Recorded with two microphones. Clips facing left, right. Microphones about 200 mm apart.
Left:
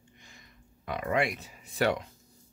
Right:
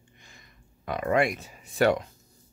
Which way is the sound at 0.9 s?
45° right (ahead or behind).